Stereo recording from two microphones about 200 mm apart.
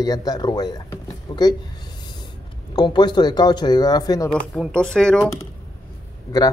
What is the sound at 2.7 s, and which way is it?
Speech, 20° left (ahead or behind).